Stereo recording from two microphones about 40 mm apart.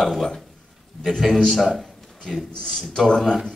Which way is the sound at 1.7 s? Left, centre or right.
Centre.